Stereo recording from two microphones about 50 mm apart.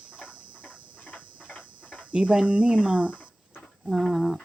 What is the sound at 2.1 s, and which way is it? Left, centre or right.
Speech, centre.